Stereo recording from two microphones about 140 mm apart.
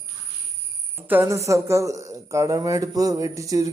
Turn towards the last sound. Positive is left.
turn(degrees=-25)  # may be behind; listen again after turning